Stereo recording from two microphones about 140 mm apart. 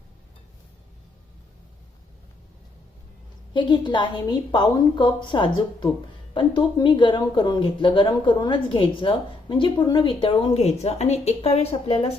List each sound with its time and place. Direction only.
3.5 s speech: 35° left (ahead or behind)